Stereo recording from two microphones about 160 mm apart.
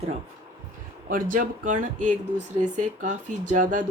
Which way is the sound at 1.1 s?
60° right (ahead or behind).